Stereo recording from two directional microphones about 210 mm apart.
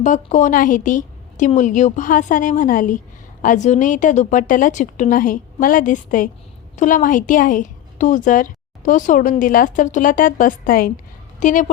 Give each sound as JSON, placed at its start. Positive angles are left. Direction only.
{"t": 0.0, "sound": "a woman's voice", "side_deg": 35}